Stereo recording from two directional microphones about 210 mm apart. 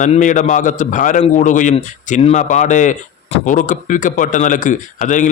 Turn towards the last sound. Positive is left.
turn(degrees=35)  # may be behind; listen again after turning